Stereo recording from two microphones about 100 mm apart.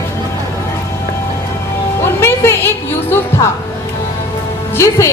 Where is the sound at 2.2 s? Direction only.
25° left (ahead or behind).